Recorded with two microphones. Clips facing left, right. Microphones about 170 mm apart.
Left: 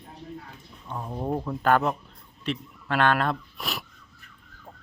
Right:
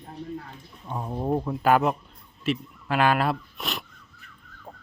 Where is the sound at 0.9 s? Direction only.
10° right (ahead or behind).